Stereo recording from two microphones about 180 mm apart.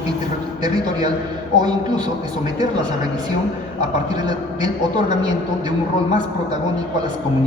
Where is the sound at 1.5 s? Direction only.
25° right (ahead or behind).